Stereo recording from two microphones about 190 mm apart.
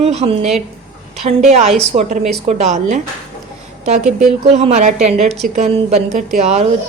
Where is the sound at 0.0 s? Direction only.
35° right (ahead or behind).